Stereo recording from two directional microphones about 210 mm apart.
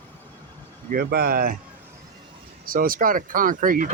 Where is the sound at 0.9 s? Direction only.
45° right (ahead or behind).